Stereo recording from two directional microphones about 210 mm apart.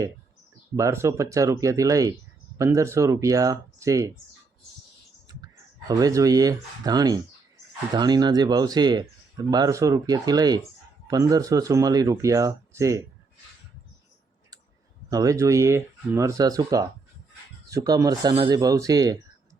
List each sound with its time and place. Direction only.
0.8 s speech: 15° right (ahead or behind)
5.9 s speech: 15° right (ahead or behind)
15.1 s speech: 15° right (ahead or behind)